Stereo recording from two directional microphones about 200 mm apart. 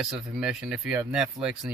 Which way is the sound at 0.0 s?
Centre (ahead or behind).